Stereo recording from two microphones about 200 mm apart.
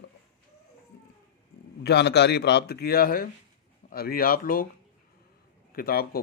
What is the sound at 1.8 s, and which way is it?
A man's voice, 55° left (ahead or behind).